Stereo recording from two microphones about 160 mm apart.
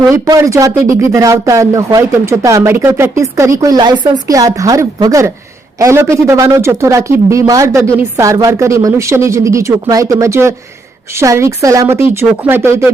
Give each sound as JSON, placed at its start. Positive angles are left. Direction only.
{"t": 0.0, "sound": "speech", "side_deg": -20}